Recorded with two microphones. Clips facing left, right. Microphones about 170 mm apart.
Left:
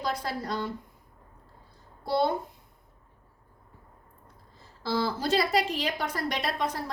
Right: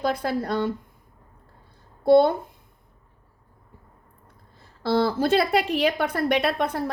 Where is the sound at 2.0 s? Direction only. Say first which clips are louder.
Right 10 dB; 55° right (ahead or behind).